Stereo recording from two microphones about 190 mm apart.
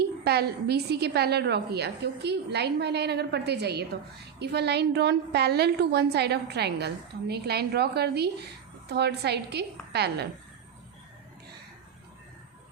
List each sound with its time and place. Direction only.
0.3 s a woman's voice: 60° right (ahead or behind)